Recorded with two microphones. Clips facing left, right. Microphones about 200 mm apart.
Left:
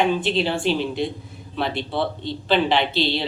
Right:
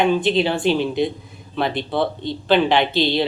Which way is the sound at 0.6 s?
50° right (ahead or behind).